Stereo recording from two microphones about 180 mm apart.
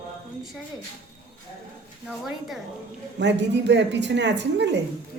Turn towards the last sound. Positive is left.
turn(degrees=-75)  # may be behind; listen again after turning